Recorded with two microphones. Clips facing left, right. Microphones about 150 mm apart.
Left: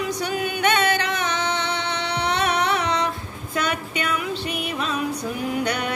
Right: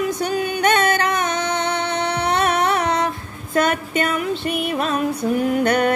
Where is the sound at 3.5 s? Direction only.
50° right (ahead or behind).